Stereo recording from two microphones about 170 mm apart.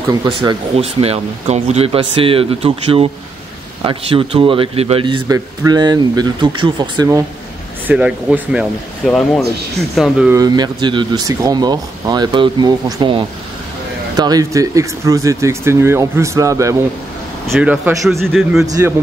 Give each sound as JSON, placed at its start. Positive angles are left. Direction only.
{"t": 0.1, "sound": "speech", "side_deg": -25}
{"t": 0.7, "sound": "speech", "side_deg": -35}
{"t": 7.8, "sound": "a man's voice", "side_deg": -5}
{"t": 10.3, "sound": "speech", "side_deg": -25}
{"t": 17.5, "sound": "a man's voice", "side_deg": -10}